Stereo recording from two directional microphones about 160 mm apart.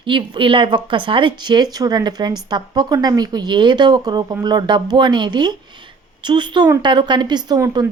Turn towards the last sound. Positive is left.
turn(degrees=-20)  # may be behind; listen again after turning